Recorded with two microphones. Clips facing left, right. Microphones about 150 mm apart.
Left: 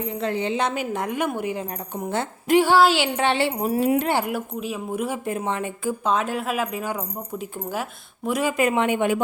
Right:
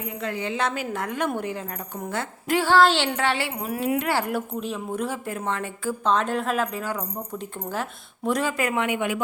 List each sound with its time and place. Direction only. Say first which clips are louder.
0.0 s a woman's voice: left 4 dB; 30° left (ahead or behind); by 3.1 s 10° left (ahead or behind)
3.2 s a woman's voice: left 4 dB; 25° left (ahead or behind)
4.3 s a woman's voice: even; 5° left (ahead or behind); by 9.2 s 30° left (ahead or behind)